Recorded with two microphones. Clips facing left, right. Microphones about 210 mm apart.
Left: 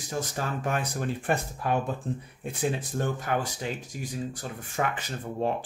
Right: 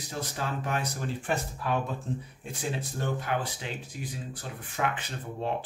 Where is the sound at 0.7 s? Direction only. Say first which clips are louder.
Left 3 dB; 50° left (ahead or behind).